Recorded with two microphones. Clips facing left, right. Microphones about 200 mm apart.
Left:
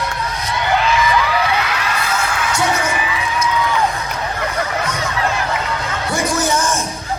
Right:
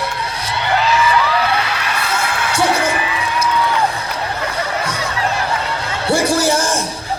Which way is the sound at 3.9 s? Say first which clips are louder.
Even; 35° right (ahead or behind).